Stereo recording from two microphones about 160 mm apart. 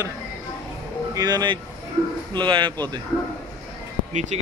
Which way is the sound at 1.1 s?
25° right (ahead or behind).